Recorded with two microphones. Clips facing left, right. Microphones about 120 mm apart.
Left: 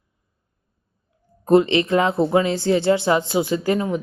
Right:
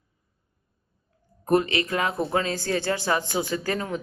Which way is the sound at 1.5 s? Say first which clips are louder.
Left 7 dB; 25° left (ahead or behind).